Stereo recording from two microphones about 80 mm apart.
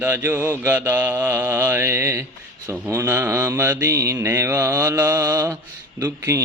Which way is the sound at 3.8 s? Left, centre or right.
Right.